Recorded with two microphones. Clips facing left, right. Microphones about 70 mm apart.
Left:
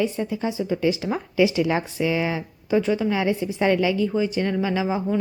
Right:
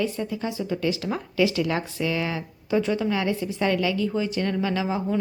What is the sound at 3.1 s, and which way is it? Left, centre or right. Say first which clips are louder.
A woman's voice: left 2 dB; centre.